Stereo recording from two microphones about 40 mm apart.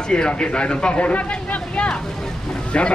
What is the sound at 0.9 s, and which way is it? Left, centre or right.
Speech, left.